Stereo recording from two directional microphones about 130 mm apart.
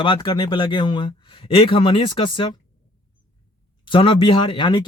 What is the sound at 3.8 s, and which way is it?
Speech, 40° left (ahead or behind).